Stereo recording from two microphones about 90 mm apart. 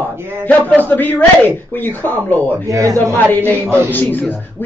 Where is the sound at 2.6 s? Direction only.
35° right (ahead or behind).